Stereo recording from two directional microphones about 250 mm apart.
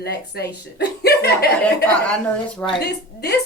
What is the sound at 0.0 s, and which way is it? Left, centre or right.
A woman's voice, left.